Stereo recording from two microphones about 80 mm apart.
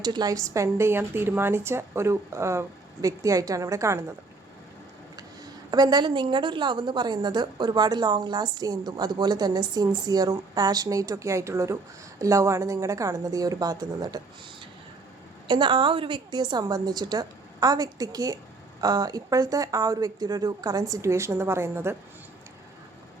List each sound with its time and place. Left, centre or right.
0.0 s speech: right
5.7 s a woman's voice: right
15.4 s a woman's voice: right
21.0 s speech: right